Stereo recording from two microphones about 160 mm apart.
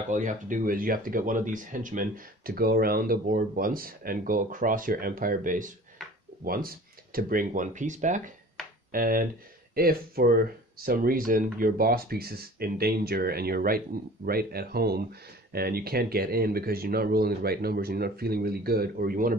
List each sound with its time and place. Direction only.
0.1 s speech: 50° right (ahead or behind)
8.9 s speech: 60° right (ahead or behind)